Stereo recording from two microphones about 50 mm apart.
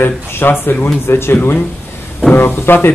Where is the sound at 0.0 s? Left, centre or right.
Left.